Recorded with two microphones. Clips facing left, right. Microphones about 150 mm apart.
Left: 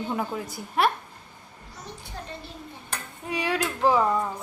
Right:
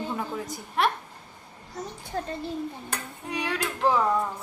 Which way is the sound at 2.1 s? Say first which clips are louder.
Right 9 dB; 55° right (ahead or behind).